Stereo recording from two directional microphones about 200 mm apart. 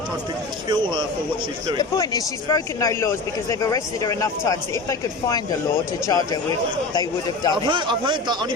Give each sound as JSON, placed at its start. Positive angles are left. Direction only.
{"t": 0.7, "sound": "speech", "side_deg": -25}
{"t": 1.8, "sound": "speech", "side_deg": 20}
{"t": 7.5, "sound": "speech", "side_deg": -25}